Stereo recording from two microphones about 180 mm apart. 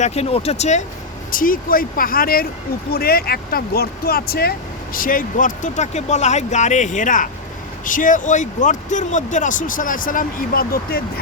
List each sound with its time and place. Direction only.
0.0 s speech: 35° left (ahead or behind)
1.3 s speech: 50° left (ahead or behind)